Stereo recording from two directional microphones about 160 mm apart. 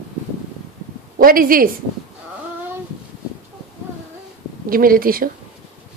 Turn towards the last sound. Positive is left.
turn(degrees=-65)  # may be behind; listen again after turning